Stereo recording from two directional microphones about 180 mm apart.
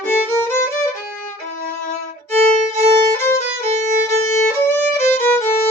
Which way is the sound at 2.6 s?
15° left (ahead or behind).